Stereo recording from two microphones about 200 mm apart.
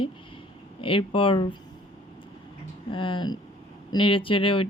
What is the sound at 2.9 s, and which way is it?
Speech, 25° left (ahead or behind).